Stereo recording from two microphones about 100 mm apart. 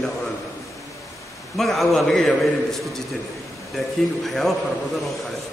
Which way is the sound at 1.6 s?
Centre (ahead or behind).